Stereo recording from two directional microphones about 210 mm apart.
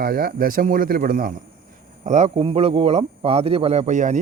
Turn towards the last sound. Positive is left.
turn(degrees=-35)  # may be behind; listen again after turning